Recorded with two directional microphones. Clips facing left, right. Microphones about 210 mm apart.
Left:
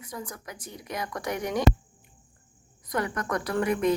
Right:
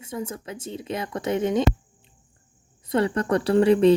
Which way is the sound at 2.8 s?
30° right (ahead or behind).